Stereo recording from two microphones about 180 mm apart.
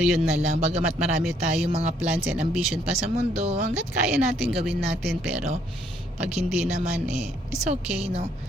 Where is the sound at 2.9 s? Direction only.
35° right (ahead or behind).